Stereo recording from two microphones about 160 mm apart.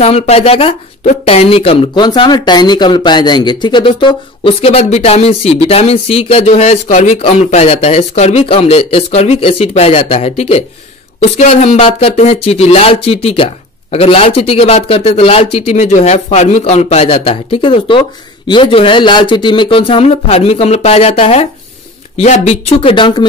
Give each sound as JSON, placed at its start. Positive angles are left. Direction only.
{"t": 0.0, "sound": "speech", "side_deg": 40}